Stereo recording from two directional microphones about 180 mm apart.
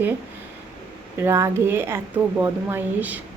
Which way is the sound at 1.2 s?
15° right (ahead or behind).